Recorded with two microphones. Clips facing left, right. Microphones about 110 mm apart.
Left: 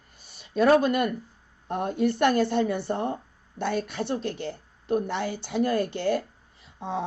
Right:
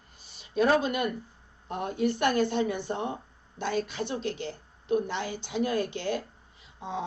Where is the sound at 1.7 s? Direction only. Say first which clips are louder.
Left 3 dB; 50° left (ahead or behind).